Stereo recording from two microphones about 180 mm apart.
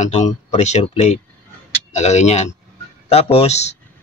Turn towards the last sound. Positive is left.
turn(degrees=40)  # may be behind; listen again after turning